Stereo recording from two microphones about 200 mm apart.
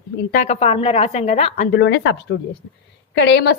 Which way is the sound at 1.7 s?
60° left (ahead or behind).